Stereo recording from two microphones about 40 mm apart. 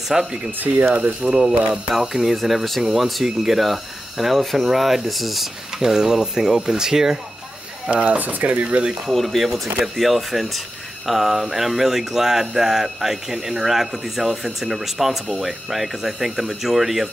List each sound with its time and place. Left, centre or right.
0.1 s speech: centre
1.4 s speech: centre
7.9 s speech: right
8.2 s speech: right
9.1 s speech: centre